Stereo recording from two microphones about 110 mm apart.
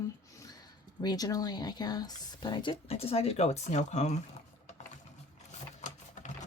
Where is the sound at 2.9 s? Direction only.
65° left (ahead or behind); by 4.2 s 90° left.